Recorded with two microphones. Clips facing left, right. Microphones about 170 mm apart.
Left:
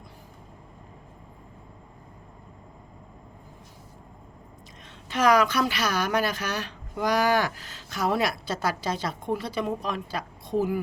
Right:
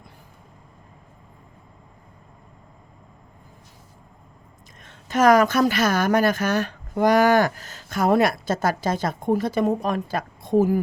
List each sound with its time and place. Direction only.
4.9 s a woman's voice: 45° right (ahead or behind)